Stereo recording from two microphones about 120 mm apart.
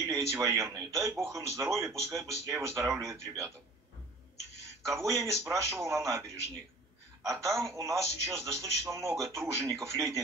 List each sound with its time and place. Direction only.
0.1 s a man's voice: 25° right (ahead or behind)
4.8 s a man's voice: 25° right (ahead or behind)
7.2 s a man's voice: 25° right (ahead or behind)